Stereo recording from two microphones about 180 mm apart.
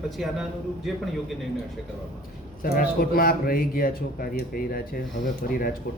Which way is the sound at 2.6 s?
55° left (ahead or behind).